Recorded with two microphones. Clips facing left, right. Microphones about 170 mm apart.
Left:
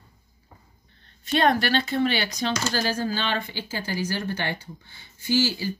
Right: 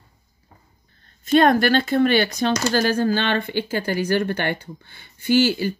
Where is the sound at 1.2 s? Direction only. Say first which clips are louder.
Right 6 dB; 45° right (ahead or behind).